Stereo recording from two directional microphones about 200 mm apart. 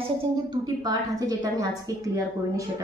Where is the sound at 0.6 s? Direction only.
20° right (ahead or behind).